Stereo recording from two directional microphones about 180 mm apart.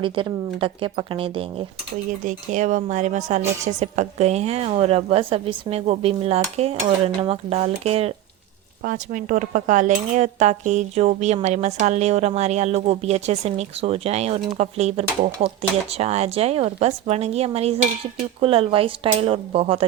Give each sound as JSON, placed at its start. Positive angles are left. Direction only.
{"t": 0.0, "sound": "speech", "side_deg": -30}
{"t": 2.2, "sound": "cutlery", "side_deg": -45}
{"t": 8.8, "sound": "cutlery", "side_deg": -50}